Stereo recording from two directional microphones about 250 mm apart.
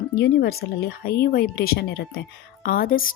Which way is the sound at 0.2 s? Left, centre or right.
Left.